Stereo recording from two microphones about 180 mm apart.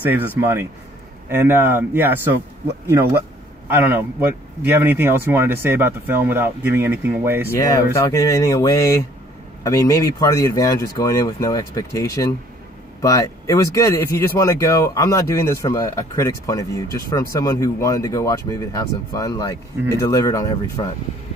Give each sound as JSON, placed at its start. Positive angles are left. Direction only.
{"t": 0.0, "sound": "speech", "side_deg": -10}
{"t": 3.7, "sound": "speech", "side_deg": -10}
{"t": 7.4, "sound": "speech", "side_deg": 15}